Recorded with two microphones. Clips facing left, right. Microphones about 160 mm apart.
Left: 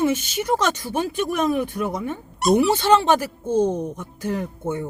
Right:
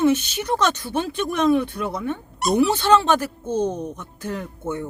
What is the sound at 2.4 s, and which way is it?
Speech, centre (ahead or behind).